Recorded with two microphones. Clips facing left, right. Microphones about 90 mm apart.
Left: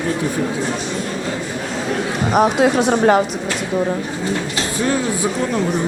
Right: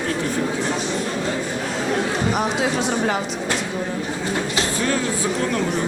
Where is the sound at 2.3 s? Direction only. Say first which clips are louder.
Left 7 dB; 55° left (ahead or behind).